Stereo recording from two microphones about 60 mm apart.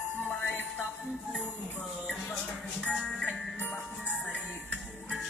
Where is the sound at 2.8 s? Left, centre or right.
Centre.